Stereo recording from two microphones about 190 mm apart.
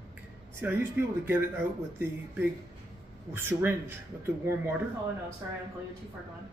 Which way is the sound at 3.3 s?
10° right (ahead or behind).